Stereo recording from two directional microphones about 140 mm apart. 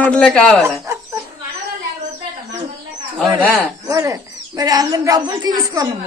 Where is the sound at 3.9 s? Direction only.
25° right (ahead or behind).